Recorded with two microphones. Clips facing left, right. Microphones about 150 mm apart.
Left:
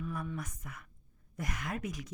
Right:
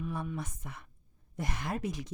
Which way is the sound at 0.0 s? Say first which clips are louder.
Right 2 dB; 30° right (ahead or behind).